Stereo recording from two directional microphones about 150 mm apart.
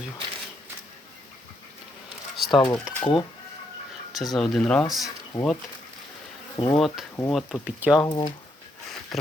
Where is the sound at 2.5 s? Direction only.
30° left (ahead or behind).